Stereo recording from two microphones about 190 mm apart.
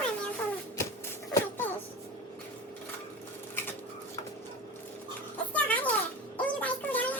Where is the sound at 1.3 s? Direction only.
10° left (ahead or behind).